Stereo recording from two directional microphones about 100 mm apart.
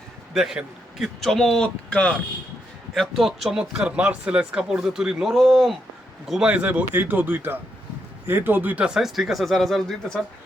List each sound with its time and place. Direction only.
0.3 s speech: 5° right (ahead or behind)